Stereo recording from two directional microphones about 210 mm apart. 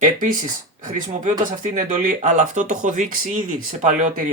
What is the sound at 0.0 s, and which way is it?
Speech, 40° right (ahead or behind).